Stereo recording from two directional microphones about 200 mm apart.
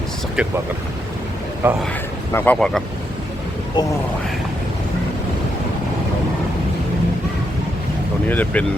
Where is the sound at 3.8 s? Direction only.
20° left (ahead or behind).